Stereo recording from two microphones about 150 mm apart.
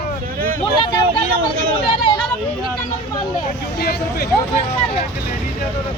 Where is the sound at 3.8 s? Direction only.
90° left.